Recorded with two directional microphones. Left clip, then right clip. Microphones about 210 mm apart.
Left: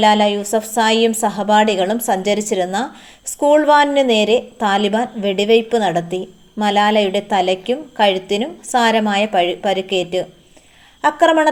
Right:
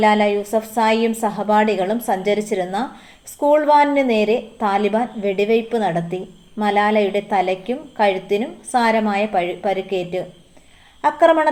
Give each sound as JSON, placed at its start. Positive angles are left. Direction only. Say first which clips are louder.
{"t": 0.0, "sound": "a woman's voice", "louder": "left 2 dB", "side_deg": 30}